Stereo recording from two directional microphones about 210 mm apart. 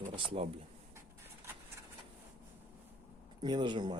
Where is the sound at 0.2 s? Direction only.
25° right (ahead or behind).